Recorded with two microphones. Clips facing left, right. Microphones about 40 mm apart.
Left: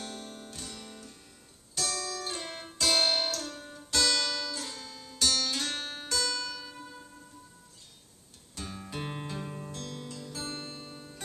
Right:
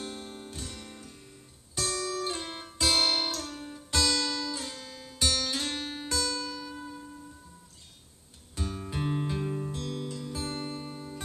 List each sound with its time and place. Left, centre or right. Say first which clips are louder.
0.0 s music: right 2 dB; right
3.6 s music: even; centre
8.5 s music: right 4 dB; centre
9.0 s music: right 9 dB; centre
9.7 s music: right 5 dB; centre